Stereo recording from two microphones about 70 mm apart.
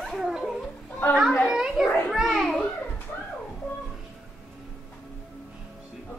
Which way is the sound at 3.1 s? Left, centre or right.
Left.